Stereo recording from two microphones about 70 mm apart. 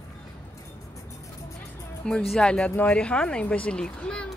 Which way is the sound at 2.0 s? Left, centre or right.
Centre.